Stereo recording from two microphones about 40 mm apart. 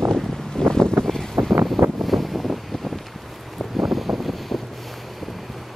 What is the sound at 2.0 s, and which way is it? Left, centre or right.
Vehicle, centre.